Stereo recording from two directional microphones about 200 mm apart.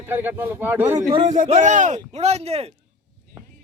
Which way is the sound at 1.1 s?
30° right (ahead or behind).